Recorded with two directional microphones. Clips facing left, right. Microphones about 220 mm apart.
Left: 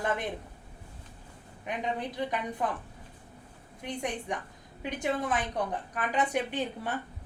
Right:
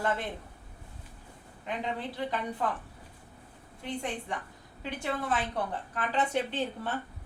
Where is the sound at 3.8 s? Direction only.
15° left (ahead or behind).